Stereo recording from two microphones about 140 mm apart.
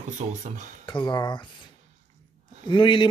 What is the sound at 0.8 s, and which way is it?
Speech, 35° left (ahead or behind).